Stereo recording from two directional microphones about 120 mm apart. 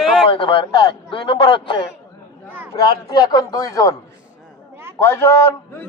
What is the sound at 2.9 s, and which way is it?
A man's voice, 35° left (ahead or behind).